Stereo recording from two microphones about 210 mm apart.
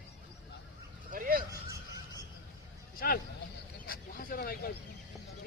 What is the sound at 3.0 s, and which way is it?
Speech, 45° left (ahead or behind).